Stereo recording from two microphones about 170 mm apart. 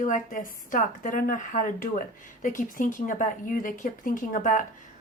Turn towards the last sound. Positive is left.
turn(degrees=50)  # may be behind; listen again after turning